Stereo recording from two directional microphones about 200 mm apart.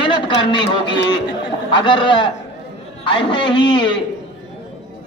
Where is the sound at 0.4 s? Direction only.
25° left (ahead or behind).